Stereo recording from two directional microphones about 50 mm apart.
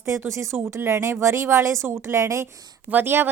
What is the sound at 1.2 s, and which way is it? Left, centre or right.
Speech, right.